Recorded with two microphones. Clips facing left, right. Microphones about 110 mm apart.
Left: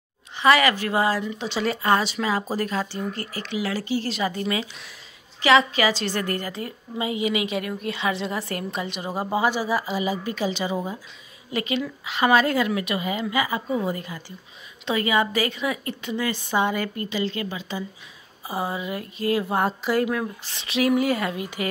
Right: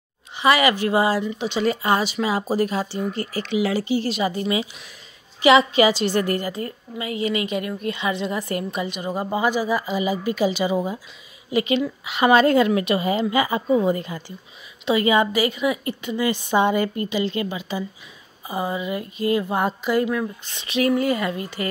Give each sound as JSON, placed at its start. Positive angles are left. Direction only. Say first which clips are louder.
{"t": 0.4, "sound": "speech", "louder": "right 1 dB", "side_deg": -10}
{"t": 7.0, "sound": "a woman's voice", "louder": "left 1 dB", "side_deg": 20}
{"t": 7.2, "sound": "speech", "louder": "right 4 dB", "side_deg": 5}
{"t": 10.2, "sound": "a woman's voice", "louder": "right 5 dB", "side_deg": -10}
{"t": 14.9, "sound": "speech", "louder": "right 4 dB", "side_deg": -5}
{"t": 16.3, "sound": "speech", "louder": "right 5 dB", "side_deg": -20}
{"t": 18.5, "sound": "speech", "louder": "right 3 dB", "side_deg": 0}